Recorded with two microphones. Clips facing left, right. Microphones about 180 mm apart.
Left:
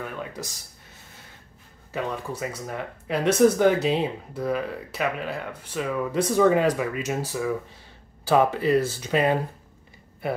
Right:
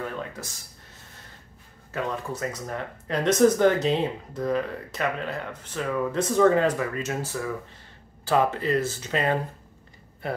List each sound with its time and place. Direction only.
0.0 s speech: 15° left (ahead or behind)
1.9 s speech: 10° left (ahead or behind)